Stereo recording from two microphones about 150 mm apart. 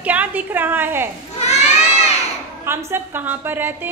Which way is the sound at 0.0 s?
10° right (ahead or behind).